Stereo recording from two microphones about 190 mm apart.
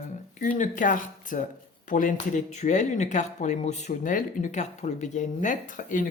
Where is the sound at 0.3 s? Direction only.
45° left (ahead or behind).